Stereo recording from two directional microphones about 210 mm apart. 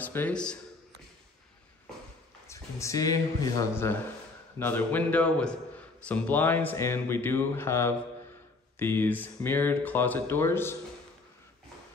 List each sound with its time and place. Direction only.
0.0 s a man's voice: 10° left (ahead or behind)
2.5 s speech: 15° left (ahead or behind)